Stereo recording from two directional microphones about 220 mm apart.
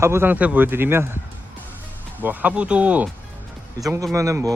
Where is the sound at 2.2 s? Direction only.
10° right (ahead or behind).